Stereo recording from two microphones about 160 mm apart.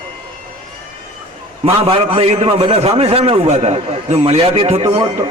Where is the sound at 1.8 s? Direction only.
40° right (ahead or behind).